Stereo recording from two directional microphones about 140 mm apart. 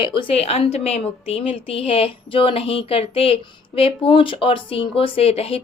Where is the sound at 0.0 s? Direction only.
40° left (ahead or behind).